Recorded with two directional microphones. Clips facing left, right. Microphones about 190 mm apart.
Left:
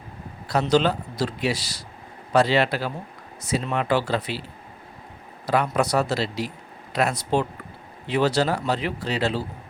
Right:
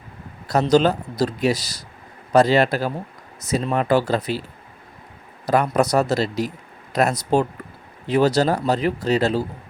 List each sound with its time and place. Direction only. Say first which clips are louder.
0.4 s speech: right 4 dB; 40° right (ahead or behind)
5.5 s speech: right 4 dB; 45° right (ahead or behind)